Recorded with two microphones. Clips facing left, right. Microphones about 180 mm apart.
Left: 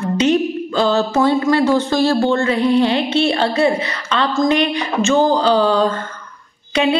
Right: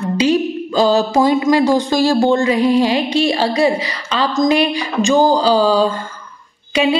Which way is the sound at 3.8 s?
35° right (ahead or behind).